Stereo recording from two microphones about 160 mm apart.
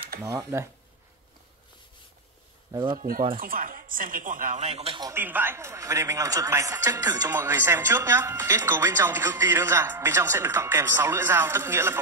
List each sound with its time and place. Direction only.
0.2 s speech: 20° right (ahead or behind)
2.7 s speech: 30° right (ahead or behind)
3.0 s speech: 60° right (ahead or behind)
4.6 s speech: 40° right (ahead or behind)
5.0 s a man's voice: 15° right (ahead or behind)